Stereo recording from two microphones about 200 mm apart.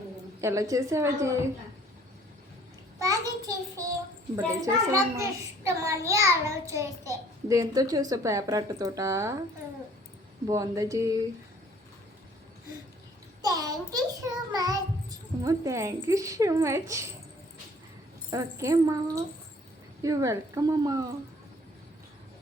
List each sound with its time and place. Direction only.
0.4 s a child's voice: 15° right (ahead or behind)
3.0 s child singing: 15° right (ahead or behind)
4.4 s a child's voice: 15° right (ahead or behind)
10.4 s a child's voice: 15° right (ahead or behind)
13.4 s a child's voice: 20° right (ahead or behind)
18.3 s a child's voice: 15° right (ahead or behind)